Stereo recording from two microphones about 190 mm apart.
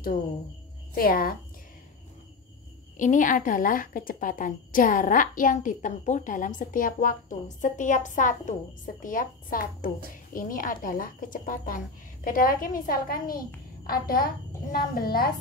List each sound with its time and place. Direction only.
0.9 s a woman's voice: 50° left (ahead or behind)
3.0 s a woman's voice: 40° left (ahead or behind)